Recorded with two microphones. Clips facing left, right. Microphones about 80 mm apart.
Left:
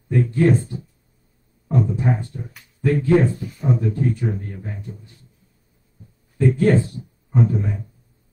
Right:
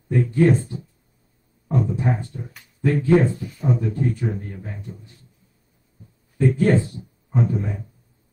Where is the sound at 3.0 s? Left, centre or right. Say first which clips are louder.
Even; right.